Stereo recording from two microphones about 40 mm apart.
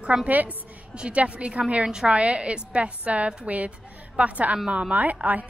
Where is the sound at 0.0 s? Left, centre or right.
Right.